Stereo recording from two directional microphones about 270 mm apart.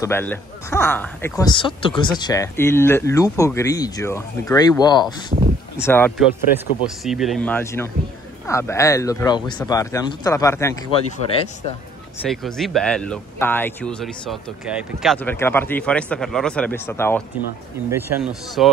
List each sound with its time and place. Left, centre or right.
0.0 s speech: centre
5.3 s speech: right
5.8 s speech: centre
12.3 s speech: centre
17.8 s speech: centre